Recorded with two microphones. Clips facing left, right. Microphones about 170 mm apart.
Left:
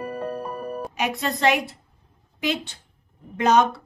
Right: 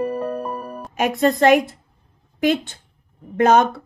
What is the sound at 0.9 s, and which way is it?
A woman's voice, 50° right (ahead or behind).